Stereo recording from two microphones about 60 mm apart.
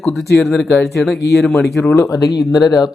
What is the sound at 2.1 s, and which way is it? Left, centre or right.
Speech, left.